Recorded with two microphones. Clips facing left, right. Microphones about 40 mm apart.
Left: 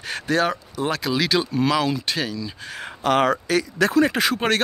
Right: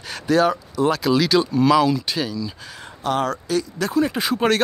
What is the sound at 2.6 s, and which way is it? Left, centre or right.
Speech, left.